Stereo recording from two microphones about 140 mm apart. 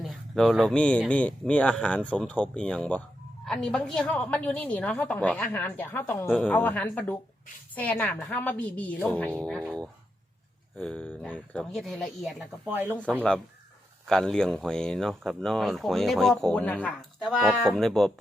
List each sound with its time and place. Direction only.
0.0 s a woman's voice: centre (ahead or behind)
12.7 s speech: 15° right (ahead or behind)
13.0 s a woman's voice: 10° left (ahead or behind)
17.2 s speech: 5° right (ahead or behind)